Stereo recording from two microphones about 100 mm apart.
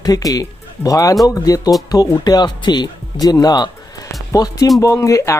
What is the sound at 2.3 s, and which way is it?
Speech, 45° left (ahead or behind).